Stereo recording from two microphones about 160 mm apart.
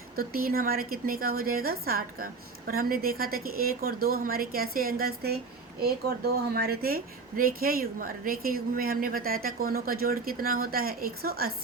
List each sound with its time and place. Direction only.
0.2 s speech: 65° right (ahead or behind)